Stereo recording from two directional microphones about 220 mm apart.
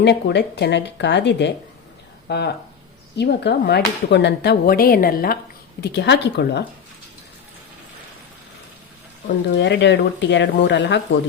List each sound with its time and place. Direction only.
0.0 s speech: 50° left (ahead or behind)
9.6 s speech: 50° left (ahead or behind)